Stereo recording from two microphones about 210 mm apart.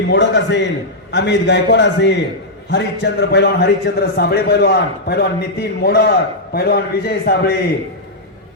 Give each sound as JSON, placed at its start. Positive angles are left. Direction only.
{"t": 0.1, "sound": "a man's voice", "side_deg": 55}